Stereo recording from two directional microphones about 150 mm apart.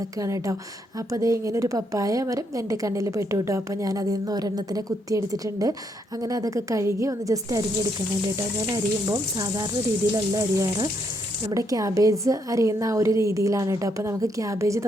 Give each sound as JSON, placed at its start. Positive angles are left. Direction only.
{"t": 0.2, "sound": "a woman's voice", "side_deg": -20}